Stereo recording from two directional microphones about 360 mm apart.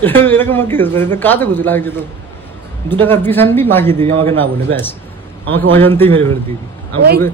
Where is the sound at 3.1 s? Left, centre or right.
Centre.